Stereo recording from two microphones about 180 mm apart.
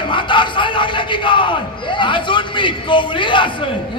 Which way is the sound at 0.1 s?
25° left (ahead or behind).